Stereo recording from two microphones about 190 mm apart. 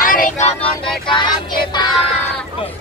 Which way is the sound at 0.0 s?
45° left (ahead or behind).